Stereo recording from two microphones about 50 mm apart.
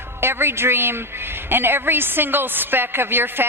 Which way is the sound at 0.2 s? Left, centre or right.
Right.